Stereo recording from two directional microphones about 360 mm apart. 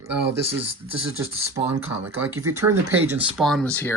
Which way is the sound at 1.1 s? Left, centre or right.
Centre.